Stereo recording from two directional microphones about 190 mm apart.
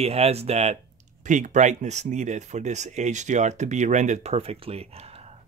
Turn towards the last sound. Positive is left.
turn(degrees=-30)  # may be behind; listen again after turning